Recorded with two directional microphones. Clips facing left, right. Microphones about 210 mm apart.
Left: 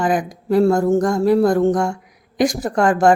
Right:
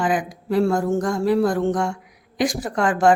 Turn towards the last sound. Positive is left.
turn(degrees=45)  # may be behind; listen again after turning